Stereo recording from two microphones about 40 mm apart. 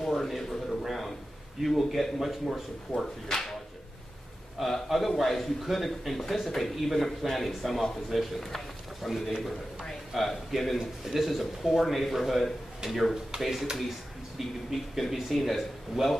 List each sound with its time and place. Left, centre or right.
0.1 s a sound: centre
1.6 s speech: centre
3.0 s speech: centre
4.6 s speech: centre
10.1 s speech: centre